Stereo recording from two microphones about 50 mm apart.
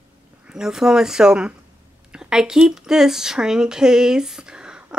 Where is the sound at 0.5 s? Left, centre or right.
Centre.